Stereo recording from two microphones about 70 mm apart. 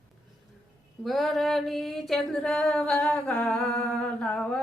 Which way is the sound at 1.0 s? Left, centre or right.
Centre.